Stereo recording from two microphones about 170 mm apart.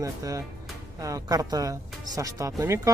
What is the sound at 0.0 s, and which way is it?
Speech, 20° right (ahead or behind).